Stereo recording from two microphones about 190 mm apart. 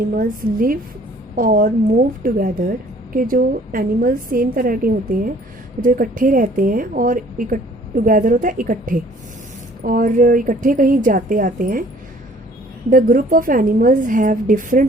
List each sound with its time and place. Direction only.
0.1 s a woman's voice: 50° right (ahead or behind)
12.9 s a woman's voice: 45° right (ahead or behind)